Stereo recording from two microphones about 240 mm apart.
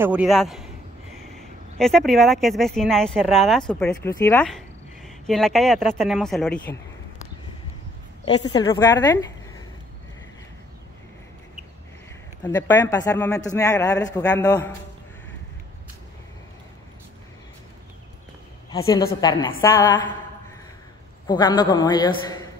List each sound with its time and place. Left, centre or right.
0.0 s a man's voice: centre
8.3 s a man's voice: centre
12.4 s a man's voice: centre
18.7 s a man's voice: centre
21.3 s a man's voice: centre